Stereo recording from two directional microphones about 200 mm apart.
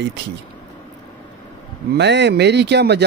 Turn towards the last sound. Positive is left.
turn(degrees=-55)  # may be behind; listen again after turning